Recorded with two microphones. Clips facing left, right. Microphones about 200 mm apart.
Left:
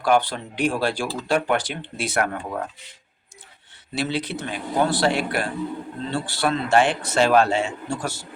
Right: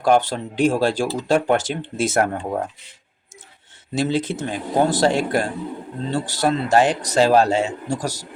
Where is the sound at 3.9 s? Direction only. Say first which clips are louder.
Right 5 dB; 45° right (ahead or behind).